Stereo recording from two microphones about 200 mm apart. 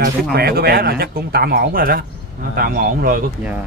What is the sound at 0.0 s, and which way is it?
Speech, 50° right (ahead or behind).